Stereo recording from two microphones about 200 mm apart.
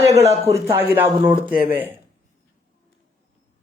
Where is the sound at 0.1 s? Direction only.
30° right (ahead or behind).